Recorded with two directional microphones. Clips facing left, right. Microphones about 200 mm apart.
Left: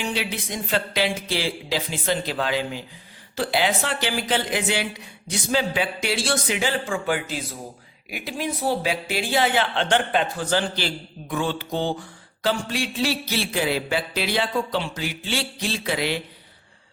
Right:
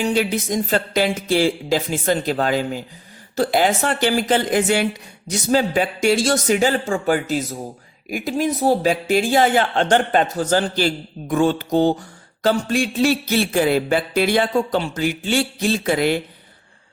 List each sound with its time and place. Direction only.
0.0 s speech: 45° right (ahead or behind)